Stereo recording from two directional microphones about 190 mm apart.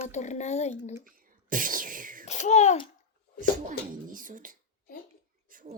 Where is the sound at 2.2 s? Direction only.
40° left (ahead or behind).